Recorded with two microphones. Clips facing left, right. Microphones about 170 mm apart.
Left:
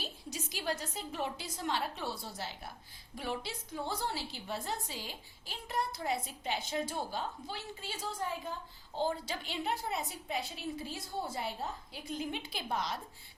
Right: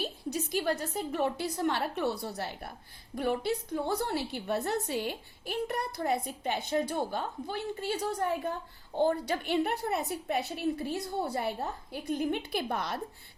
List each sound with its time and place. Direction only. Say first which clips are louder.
0.0 s a woman's voice: right 9 dB; 55° right (ahead or behind)